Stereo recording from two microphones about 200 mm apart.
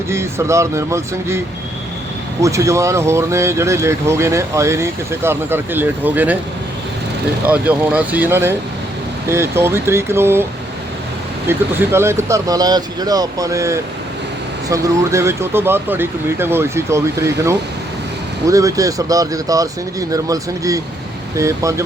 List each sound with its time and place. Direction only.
0.1 s speech: 15° right (ahead or behind)
2.4 s speech: 15° right (ahead or behind)
7.4 s speech: 10° right (ahead or behind)
11.4 s speech: 10° right (ahead or behind)
18.4 s speech: 15° right (ahead or behind)